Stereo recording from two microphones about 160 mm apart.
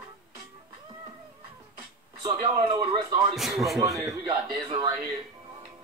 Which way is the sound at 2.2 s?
25° right (ahead or behind).